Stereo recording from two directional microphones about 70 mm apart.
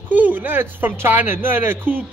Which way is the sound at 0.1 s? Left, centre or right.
Right.